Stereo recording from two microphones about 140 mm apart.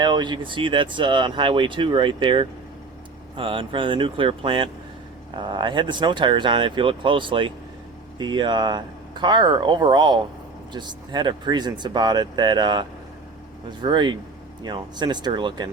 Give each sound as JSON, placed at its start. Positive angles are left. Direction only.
{"t": 0.0, "sound": "speech", "side_deg": -30}